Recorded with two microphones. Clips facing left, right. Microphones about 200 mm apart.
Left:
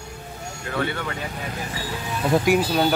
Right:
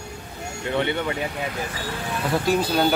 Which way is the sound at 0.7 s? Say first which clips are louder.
Right 3 dB; 20° right (ahead or behind).